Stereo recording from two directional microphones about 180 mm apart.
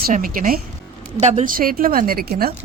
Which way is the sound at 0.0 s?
50° right (ahead or behind).